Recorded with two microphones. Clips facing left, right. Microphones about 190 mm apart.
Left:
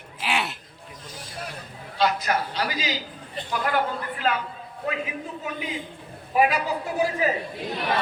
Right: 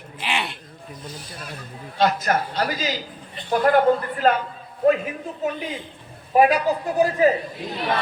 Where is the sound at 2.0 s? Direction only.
45° right (ahead or behind).